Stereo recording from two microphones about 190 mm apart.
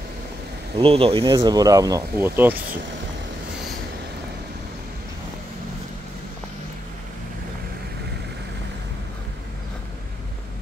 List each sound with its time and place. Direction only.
0.7 s speech: 30° right (ahead or behind); by 2.6 s 10° right (ahead or behind)